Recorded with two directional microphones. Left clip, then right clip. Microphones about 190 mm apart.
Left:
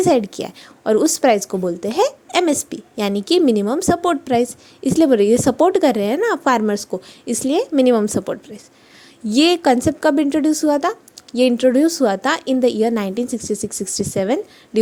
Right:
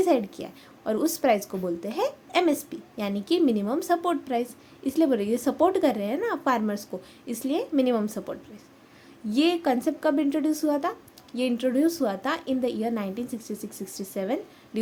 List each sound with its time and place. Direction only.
0.0 s a woman's voice: 40° left (ahead or behind)